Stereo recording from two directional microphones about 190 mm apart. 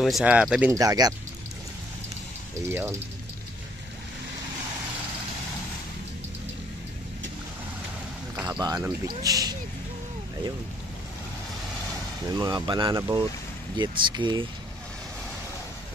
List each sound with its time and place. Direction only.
0.0 s speech: 5° right (ahead or behind)
0.7 s speech: 20° right (ahead or behind)
2.6 s speech: 10° right (ahead or behind)
8.4 s a sound: 15° right (ahead or behind)
9.0 s speech: 20° right (ahead or behind)
12.4 s speech: 20° right (ahead or behind)